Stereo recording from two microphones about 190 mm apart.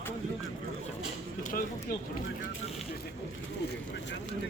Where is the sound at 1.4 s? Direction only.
45° left (ahead or behind).